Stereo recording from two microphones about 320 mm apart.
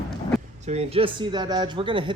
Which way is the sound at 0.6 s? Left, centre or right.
Centre.